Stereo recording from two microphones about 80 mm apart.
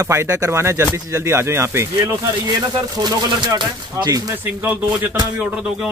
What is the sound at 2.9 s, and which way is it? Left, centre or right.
Speech, right.